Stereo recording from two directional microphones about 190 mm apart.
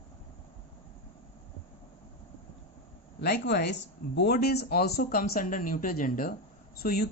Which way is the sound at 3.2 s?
55° left (ahead or behind).